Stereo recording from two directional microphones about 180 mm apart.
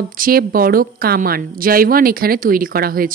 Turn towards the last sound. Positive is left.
turn(degrees=-55)  # may be behind; listen again after turning